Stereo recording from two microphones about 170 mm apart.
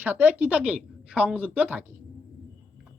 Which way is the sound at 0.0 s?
10° right (ahead or behind).